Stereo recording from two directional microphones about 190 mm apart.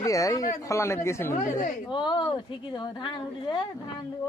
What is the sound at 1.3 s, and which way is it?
Speech, 40° left (ahead or behind).